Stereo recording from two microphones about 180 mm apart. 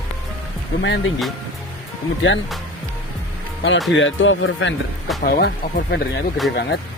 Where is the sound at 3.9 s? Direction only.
90° left.